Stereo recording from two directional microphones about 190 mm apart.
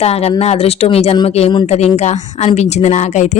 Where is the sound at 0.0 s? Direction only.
35° left (ahead or behind).